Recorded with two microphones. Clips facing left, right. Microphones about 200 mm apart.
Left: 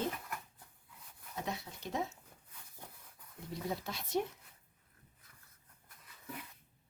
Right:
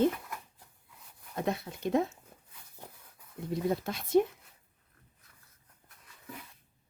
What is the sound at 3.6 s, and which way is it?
Speech, 50° right (ahead or behind).